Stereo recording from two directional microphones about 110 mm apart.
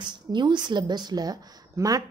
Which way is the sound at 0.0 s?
45° right (ahead or behind).